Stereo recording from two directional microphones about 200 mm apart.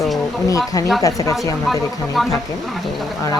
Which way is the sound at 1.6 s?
Centre (ahead or behind).